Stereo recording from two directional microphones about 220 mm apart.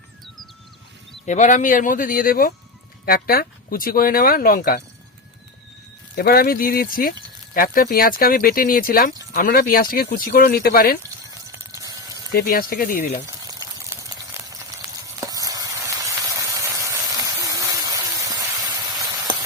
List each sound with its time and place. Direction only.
1.2 s speech: 35° left (ahead or behind)
6.1 s speech: 45° left (ahead or behind)
11.3 s a sound: 15° right (ahead or behind)
12.3 s speech: 45° left (ahead or behind)
13.2 s a sound: 15° right (ahead or behind)
15.0 s sizzle: 15° right (ahead or behind)